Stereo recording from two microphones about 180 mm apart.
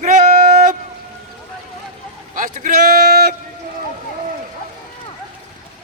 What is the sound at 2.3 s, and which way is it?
A man's voice, 50° right (ahead or behind).